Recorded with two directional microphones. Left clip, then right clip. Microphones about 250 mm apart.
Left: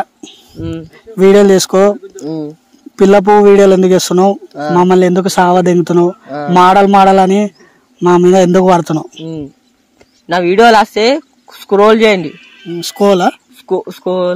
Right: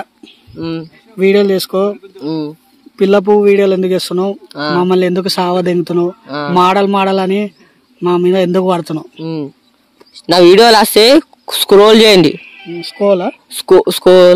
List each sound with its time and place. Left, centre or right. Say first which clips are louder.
0.0 s a sound: left 8 dB; left
0.6 s speech: right 2 dB; right
1.1 s speech: left 4 dB; left
2.2 s speech: right 2 dB; centre
3.0 s speech: left 3 dB; left
4.5 s speech: even; centre
4.7 s speech: left 4 dB; centre
9.2 s speech: right 3 dB; right
12.4 s music: right 4 dB; centre
12.6 s speech: left 2 dB; left
13.6 s speech: right 9 dB; right